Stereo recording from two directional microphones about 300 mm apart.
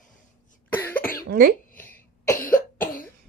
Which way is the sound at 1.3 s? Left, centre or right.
Right.